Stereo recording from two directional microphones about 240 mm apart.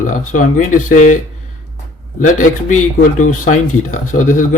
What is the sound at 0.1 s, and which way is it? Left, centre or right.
Speech, left.